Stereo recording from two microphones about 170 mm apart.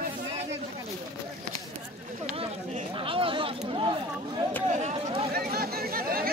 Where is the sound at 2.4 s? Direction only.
35° right (ahead or behind).